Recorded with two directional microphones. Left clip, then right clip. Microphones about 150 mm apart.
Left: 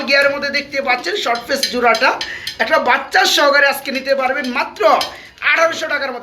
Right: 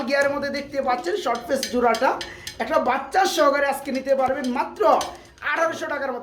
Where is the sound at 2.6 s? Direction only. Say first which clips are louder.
Left 7 dB; 5° right (ahead or behind).